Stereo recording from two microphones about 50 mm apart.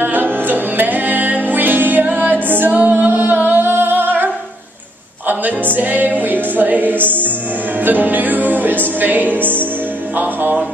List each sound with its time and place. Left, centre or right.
0.0 s music: right
3.9 s music: right
5.3 s music: right